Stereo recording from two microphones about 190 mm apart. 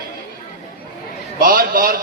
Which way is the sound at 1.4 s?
50° right (ahead or behind).